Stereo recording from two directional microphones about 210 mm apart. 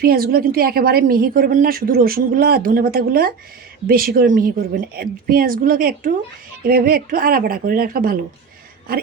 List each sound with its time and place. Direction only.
0.0 s a woman's voice: 45° right (ahead or behind)